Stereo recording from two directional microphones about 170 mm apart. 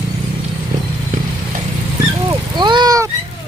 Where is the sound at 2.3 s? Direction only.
25° right (ahead or behind).